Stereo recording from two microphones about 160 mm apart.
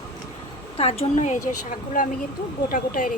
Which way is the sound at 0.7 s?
40° left (ahead or behind).